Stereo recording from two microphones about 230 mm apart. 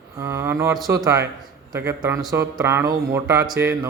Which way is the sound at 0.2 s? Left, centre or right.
Centre.